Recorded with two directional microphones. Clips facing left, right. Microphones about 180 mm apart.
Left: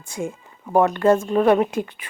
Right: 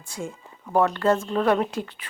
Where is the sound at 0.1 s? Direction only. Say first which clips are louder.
Left 5 dB; 15° left (ahead or behind).